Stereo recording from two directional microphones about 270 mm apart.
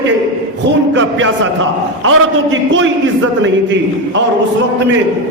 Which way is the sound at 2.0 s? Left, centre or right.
Right.